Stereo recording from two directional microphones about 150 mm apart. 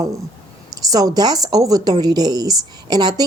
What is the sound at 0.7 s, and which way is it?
A woman's voice, 25° right (ahead or behind).